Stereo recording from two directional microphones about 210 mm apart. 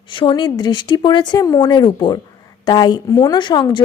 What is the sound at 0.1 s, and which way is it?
A woman's voice, 25° left (ahead or behind).